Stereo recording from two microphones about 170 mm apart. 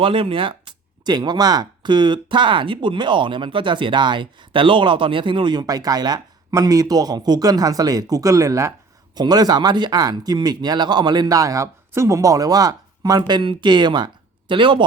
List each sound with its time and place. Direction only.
0.0 s speech: 30° right (ahead or behind)